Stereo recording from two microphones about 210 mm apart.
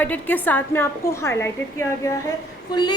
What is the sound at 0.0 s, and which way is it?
A woman's voice, 5° left (ahead or behind).